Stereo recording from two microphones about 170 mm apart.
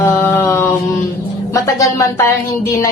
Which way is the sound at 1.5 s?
20° left (ahead or behind).